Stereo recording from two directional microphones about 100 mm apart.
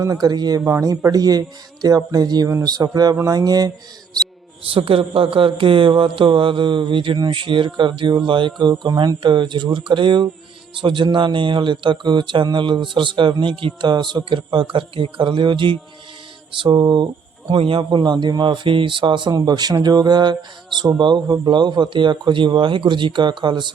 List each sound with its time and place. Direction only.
0.0 s speech: 40° right (ahead or behind)
0.6 s speech: 30° right (ahead or behind)
4.7 s speech: 65° right (ahead or behind); by 17.1 s 45° right (ahead or behind)
17.5 s speech: 55° right (ahead or behind)